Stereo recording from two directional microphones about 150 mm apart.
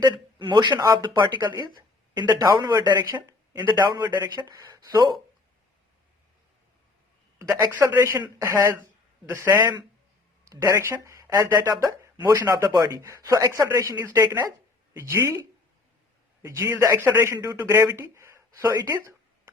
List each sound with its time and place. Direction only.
0.0 s speech: 30° right (ahead or behind)
7.3 s a man's voice: 20° right (ahead or behind)